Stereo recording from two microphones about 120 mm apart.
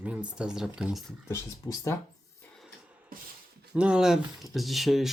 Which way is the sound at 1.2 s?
25° left (ahead or behind).